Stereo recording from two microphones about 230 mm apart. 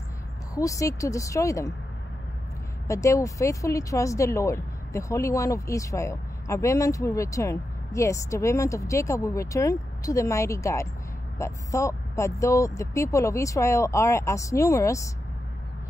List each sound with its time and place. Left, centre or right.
0.6 s speech: centre
2.9 s speech: centre